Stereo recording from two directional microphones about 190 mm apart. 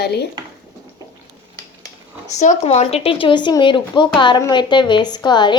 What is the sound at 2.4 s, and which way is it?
Speech, 35° left (ahead or behind).